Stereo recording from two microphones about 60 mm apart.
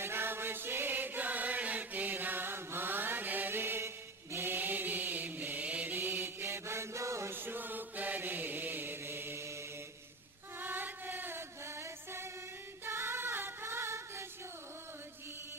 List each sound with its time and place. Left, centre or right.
0.0 s chant: right
7.3 s chant: right
10.6 s music: right